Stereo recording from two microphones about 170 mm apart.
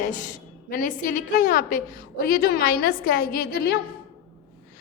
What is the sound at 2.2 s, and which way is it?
A woman's voice, 60° left (ahead or behind).